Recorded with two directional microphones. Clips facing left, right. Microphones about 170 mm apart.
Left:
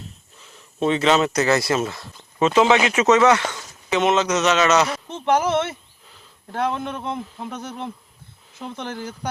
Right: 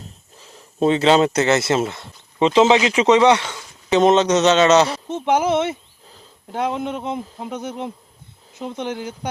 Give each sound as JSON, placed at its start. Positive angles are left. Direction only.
{"t": 0.3, "sound": "speech", "side_deg": -35}
{"t": 3.8, "sound": "speech", "side_deg": -30}
{"t": 5.2, "sound": "speech", "side_deg": -15}